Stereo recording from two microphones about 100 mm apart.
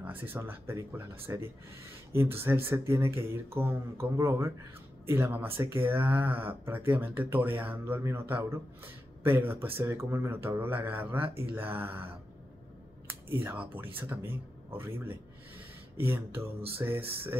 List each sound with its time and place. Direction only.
0.3 s speech: 20° right (ahead or behind)
13.3 s speech: 20° right (ahead or behind)